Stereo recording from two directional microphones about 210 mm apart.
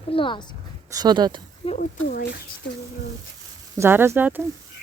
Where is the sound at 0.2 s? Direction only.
25° left (ahead or behind).